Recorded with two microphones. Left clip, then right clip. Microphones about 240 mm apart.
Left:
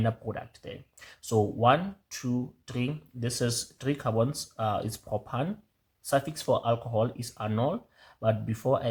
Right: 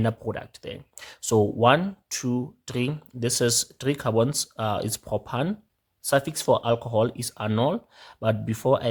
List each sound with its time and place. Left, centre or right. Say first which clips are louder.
0.0 s speech: right 4 dB; right